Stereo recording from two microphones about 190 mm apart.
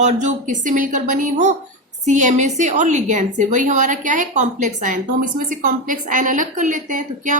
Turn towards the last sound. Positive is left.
turn(degrees=-40)  # may be behind; listen again after turning